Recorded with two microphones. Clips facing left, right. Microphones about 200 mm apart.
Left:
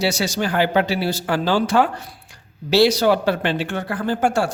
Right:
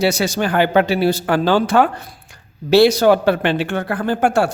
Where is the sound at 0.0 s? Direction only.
55° right (ahead or behind).